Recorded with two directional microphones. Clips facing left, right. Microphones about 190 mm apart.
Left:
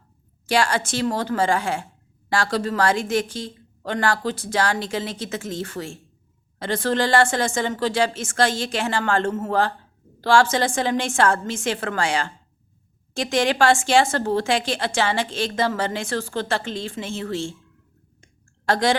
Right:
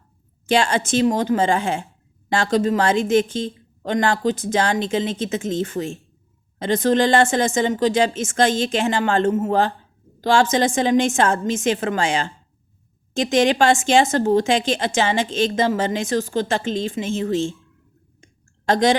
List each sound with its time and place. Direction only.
0.4 s a woman's voice: 25° right (ahead or behind)
18.2 s clicking: 20° right (ahead or behind)